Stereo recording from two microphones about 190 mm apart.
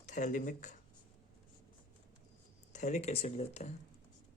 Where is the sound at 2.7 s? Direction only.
40° left (ahead or behind).